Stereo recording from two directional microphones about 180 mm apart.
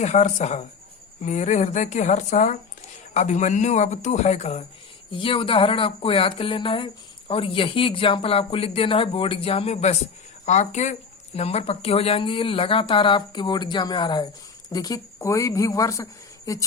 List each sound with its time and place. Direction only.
0.0 s speech: 40° left (ahead or behind); by 16.6 s 20° left (ahead or behind)